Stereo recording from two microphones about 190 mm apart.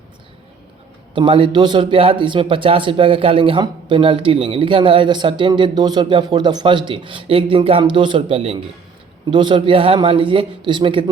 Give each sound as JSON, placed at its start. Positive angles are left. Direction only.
{"t": 1.1, "sound": "speech", "side_deg": -25}